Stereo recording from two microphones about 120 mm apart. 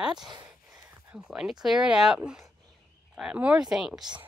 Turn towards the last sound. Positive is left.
turn(degrees=-5)  # may be behind; listen again after turning